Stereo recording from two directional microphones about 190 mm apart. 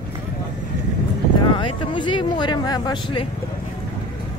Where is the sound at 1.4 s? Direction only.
25° left (ahead or behind).